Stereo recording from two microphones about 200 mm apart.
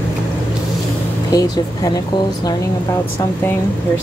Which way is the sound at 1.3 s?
20° left (ahead or behind).